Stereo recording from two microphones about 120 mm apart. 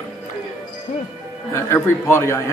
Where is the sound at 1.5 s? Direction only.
20° left (ahead or behind).